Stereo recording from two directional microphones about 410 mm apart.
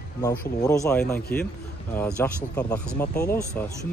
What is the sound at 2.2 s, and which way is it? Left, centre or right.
Speech, centre.